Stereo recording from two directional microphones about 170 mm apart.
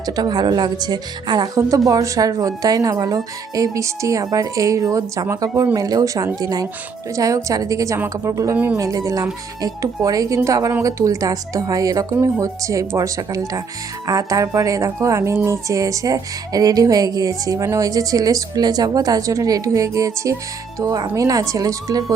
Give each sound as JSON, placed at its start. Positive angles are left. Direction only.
{"t": 0.0, "sound": "speech", "side_deg": -25}